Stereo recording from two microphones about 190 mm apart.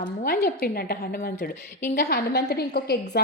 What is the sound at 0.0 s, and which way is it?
A woman's voice, 50° left (ahead or behind).